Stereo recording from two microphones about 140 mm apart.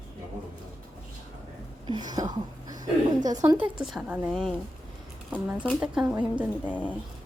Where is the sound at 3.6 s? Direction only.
5° right (ahead or behind).